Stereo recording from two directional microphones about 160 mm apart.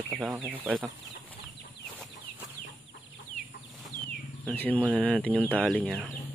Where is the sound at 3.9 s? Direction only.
55° left (ahead or behind).